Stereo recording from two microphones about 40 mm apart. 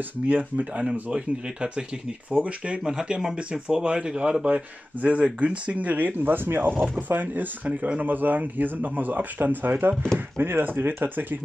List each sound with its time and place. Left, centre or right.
0.3 s speech: right
1.1 s speech: right
2.9 s speech: centre
3.6 s speech: right
4.5 s speech: right
7.0 s speech: right
7.6 s speech: right